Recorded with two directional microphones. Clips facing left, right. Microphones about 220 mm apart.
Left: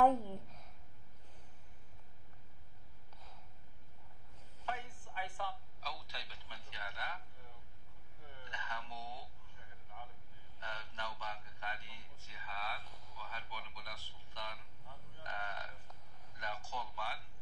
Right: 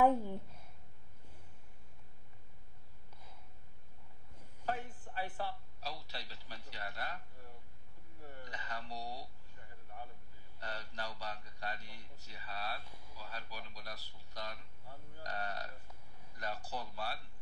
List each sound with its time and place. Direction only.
0.0 s a woman's voice: 10° right (ahead or behind)
5.1 s a man's voice: 40° right (ahead or behind)
8.4 s a man's voice: 35° right (ahead or behind)
10.6 s a man's voice: 35° right (ahead or behind)
12.8 s a man's voice: 10° right (ahead or behind)
13.2 s a man's voice: 40° right (ahead or behind)